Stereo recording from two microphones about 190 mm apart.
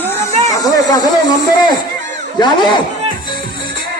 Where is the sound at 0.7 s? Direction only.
20° left (ahead or behind).